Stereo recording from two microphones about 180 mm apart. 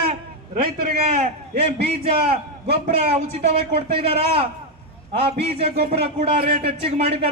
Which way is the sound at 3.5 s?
30° right (ahead or behind).